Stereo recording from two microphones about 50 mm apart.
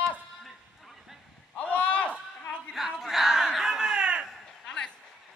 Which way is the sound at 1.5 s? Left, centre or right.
Left.